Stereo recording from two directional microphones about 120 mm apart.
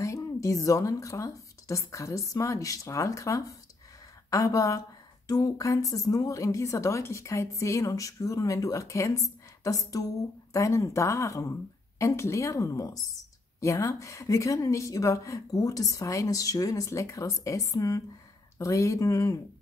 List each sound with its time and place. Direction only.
0.0 s a woman's voice: 25° left (ahead or behind)